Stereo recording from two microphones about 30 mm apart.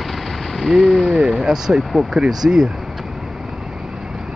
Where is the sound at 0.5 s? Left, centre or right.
Centre.